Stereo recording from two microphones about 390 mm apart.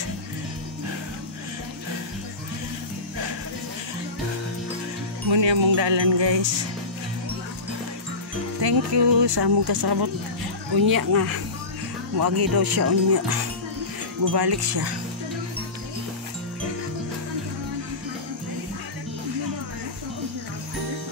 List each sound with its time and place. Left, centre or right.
5.3 s music: right
8.5 s speech: right
10.7 s speech: right